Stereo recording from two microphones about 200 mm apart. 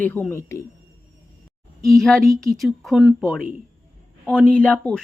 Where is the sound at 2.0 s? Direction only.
Centre (ahead or behind).